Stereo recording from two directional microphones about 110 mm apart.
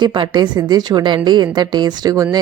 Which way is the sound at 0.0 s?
45° right (ahead or behind).